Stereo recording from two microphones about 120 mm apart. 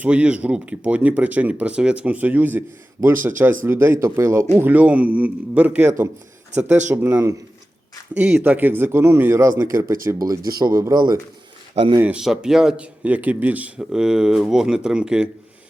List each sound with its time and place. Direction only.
0.0 s speech: 10° right (ahead or behind); by 11.2 s 35° right (ahead or behind)
11.7 s a man's voice: 55° right (ahead or behind)
11.9 s speech: 10° right (ahead or behind)